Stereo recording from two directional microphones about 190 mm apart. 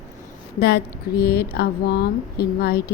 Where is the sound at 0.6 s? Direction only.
60° left (ahead or behind).